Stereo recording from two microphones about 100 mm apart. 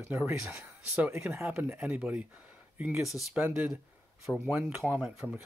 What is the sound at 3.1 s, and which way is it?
Speech, centre (ahead or behind).